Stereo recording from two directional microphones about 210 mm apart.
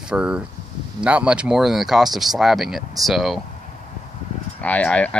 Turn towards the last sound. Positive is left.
turn(degrees=5)  # may be behind; listen again after turning